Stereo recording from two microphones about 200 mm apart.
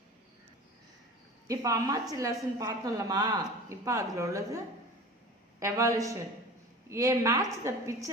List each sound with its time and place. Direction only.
1.5 s a woman's voice: 15° right (ahead or behind)